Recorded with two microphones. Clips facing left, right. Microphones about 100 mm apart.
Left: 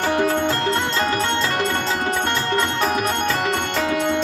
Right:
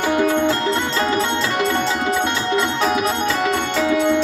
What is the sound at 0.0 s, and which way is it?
Music, 35° left (ahead or behind).